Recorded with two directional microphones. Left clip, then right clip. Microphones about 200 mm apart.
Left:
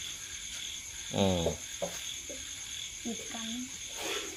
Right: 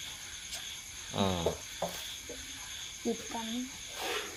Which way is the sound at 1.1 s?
30° left (ahead or behind).